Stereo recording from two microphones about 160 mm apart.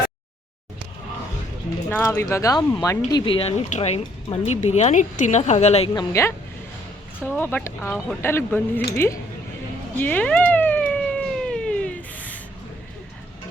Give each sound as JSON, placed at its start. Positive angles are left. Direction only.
{"t": 1.9, "sound": "speech", "side_deg": 15}
{"t": 5.9, "sound": "speech", "side_deg": 20}
{"t": 10.0, "sound": "cat", "side_deg": 10}